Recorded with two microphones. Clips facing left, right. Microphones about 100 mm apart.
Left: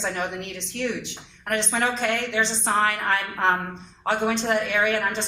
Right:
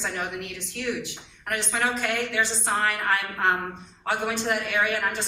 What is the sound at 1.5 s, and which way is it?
A woman's voice, 20° left (ahead or behind).